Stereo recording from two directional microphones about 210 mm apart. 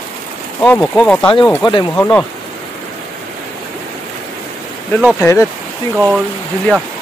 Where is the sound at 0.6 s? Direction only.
5° left (ahead or behind).